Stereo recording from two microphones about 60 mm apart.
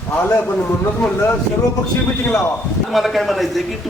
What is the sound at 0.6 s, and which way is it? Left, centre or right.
Speech, left.